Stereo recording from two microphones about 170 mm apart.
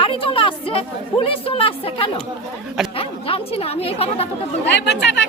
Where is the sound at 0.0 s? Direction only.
30° left (ahead or behind).